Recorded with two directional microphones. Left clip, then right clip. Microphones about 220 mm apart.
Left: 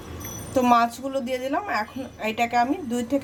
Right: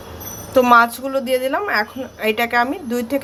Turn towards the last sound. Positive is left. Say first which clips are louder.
# right 4 dB
turn(degrees=-5)  # may be behind; listen again after turning